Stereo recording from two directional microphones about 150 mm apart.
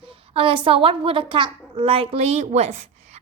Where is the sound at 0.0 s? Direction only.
35° right (ahead or behind).